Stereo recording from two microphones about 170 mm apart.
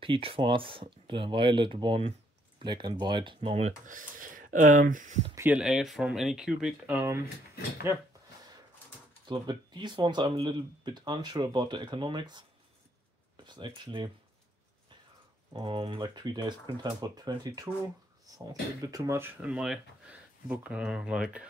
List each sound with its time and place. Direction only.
0.0 s speech: 30° right (ahead or behind); by 5.3 s 45° right (ahead or behind)
5.3 s speech: 10° right (ahead or behind)
9.2 s speech: 25° right (ahead or behind)
13.5 s speech: 25° right (ahead or behind)
15.5 s speech: 30° right (ahead or behind); by 21.5 s 5° right (ahead or behind)